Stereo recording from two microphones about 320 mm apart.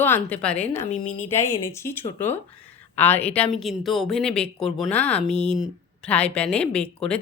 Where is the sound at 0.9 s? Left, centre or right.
Left.